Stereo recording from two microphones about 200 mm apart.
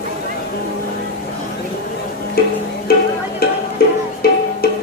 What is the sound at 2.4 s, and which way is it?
Music, 50° left (ahead or behind).